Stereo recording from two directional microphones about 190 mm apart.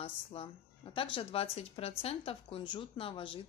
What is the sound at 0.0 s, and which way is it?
Speech, 30° left (ahead or behind).